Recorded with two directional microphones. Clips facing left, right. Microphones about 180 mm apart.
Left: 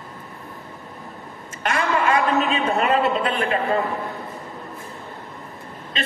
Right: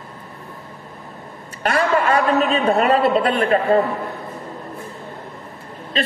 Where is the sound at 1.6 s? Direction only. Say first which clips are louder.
Right 3 dB; 35° right (ahead or behind).